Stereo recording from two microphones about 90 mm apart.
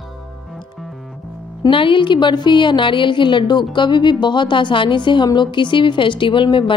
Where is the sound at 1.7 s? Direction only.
70° left (ahead or behind).